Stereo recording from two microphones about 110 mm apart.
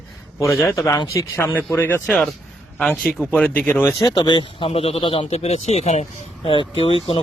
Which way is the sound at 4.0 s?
40° left (ahead or behind).